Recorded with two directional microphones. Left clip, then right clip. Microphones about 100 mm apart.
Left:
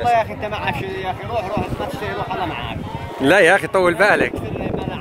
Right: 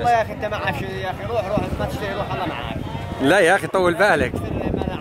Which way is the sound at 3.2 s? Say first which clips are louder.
Left 3 dB; 30° right (ahead or behind).